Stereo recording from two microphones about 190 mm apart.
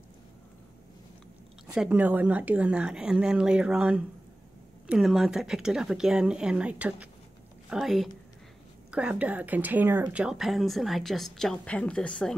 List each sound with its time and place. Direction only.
1.7 s speech: 5° right (ahead or behind)